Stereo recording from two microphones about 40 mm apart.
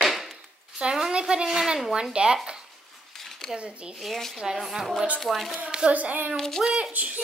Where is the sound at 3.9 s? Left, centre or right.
Centre.